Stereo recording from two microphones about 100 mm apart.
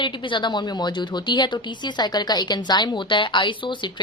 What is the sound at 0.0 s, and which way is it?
A woman's voice, 50° left (ahead or behind).